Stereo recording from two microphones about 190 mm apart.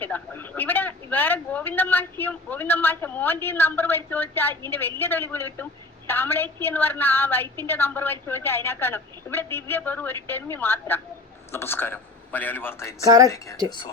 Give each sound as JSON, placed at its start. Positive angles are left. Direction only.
{"t": 0.0, "sound": "a woman's voice", "side_deg": 10}